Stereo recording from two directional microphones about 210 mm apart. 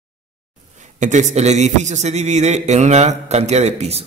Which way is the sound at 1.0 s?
35° right (ahead or behind).